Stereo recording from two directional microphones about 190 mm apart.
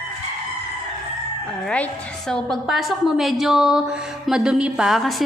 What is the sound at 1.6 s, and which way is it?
A woman's voice, 5° left (ahead or behind).